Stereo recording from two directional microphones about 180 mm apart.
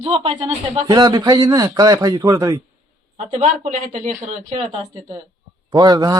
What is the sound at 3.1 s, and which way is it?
Speech, 40° right (ahead or behind).